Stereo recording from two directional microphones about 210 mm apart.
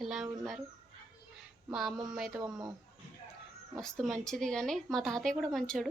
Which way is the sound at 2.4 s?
20° right (ahead or behind).